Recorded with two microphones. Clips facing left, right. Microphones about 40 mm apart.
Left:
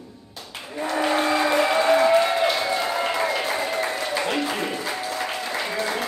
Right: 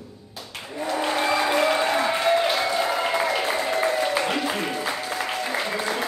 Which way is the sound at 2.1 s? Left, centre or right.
Centre.